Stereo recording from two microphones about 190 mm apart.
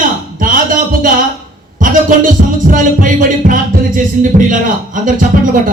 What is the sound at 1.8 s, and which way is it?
A man's voice, 45° right (ahead or behind).